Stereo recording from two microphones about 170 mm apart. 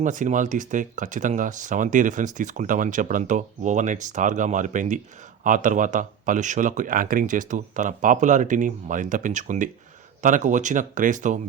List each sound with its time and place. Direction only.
0.0 s speech: 45° right (ahead or behind)